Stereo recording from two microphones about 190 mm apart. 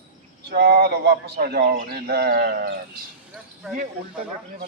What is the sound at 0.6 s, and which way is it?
A man's voice, 55° right (ahead or behind).